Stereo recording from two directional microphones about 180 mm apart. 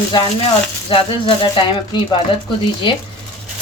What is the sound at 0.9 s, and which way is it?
A woman's voice, 30° left (ahead or behind).